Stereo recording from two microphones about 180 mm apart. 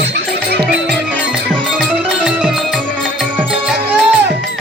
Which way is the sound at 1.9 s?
10° right (ahead or behind).